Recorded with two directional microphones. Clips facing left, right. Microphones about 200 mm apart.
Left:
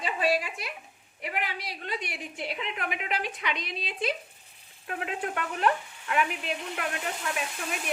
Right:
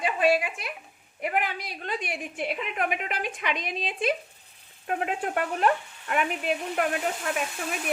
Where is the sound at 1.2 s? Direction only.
50° right (ahead or behind).